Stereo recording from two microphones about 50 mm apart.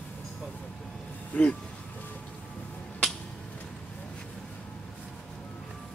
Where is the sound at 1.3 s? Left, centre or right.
Left.